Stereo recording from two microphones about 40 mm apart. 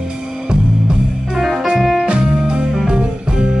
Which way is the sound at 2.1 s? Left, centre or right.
Right.